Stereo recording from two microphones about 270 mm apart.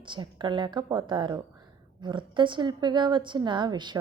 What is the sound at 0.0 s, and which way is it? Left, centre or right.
A woman's voice, centre.